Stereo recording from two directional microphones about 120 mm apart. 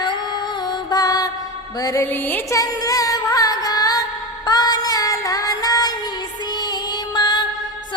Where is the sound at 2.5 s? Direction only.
30° left (ahead or behind).